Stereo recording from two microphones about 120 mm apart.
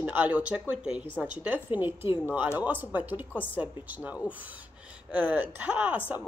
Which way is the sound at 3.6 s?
10° right (ahead or behind).